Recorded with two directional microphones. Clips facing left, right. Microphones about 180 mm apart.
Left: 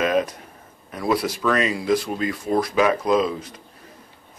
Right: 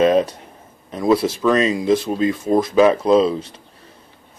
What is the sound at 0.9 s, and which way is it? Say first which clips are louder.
Speech: right 6 dB; 25° right (ahead or behind).